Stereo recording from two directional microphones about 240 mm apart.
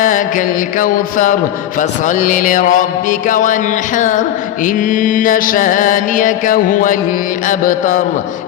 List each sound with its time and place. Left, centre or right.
0.0 s mantra: left